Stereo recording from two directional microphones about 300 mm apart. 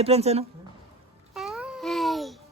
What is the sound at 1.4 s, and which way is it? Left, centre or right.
Babbling, centre.